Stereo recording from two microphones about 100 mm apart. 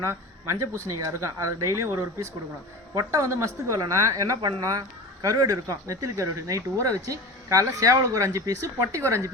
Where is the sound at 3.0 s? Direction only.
30° right (ahead or behind).